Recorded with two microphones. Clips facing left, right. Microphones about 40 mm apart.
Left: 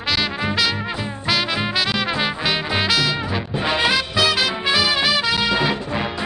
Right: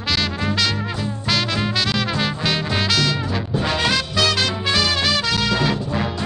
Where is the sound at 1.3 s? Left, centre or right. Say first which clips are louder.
Left 1 dB; centre.